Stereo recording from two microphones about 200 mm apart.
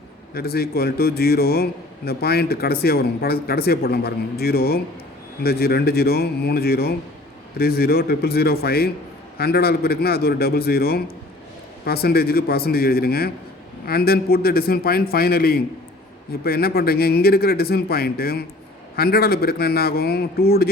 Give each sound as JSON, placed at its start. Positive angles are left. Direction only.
{"t": 0.3, "sound": "a man's voice", "side_deg": 50}